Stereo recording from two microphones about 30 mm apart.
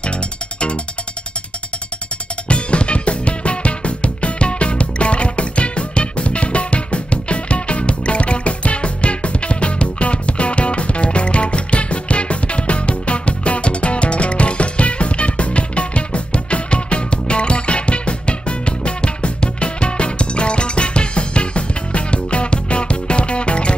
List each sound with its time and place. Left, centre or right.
2.4 s music: left